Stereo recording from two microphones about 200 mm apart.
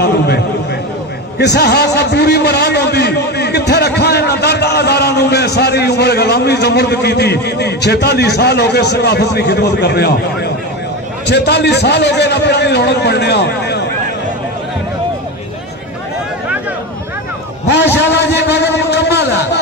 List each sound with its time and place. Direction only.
1.4 s a man's voice: 55° left (ahead or behind)
17.6 s a man's voice: 60° left (ahead or behind)